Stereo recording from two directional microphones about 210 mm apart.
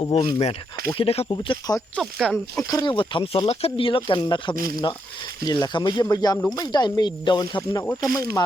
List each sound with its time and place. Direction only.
0.0 s speech: 30° left (ahead or behind)
2.0 s speech: centre (ahead or behind)
2.6 s speech: 15° left (ahead or behind)
4.5 s speech: 45° right (ahead or behind)
5.5 s speech: 20° left (ahead or behind)